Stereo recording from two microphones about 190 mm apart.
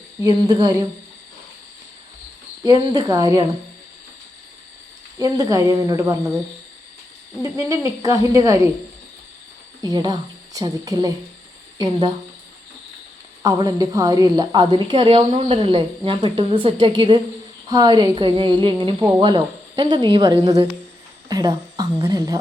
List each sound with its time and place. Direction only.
0.2 s a woman's voice: 20° right (ahead or behind)
2.6 s speech: 20° right (ahead or behind)
5.2 s speech: 15° right (ahead or behind)
7.4 s speech: 15° right (ahead or behind)
9.8 s a woman's voice: 20° right (ahead or behind)
13.4 s a woman's voice: 20° right (ahead or behind)